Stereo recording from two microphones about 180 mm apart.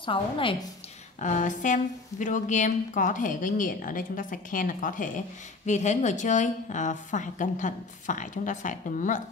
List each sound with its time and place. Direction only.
0.0 s a woman's voice: 30° left (ahead or behind)
1.2 s a woman's voice: 45° left (ahead or behind)